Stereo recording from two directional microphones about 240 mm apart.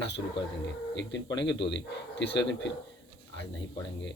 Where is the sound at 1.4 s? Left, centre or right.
Left.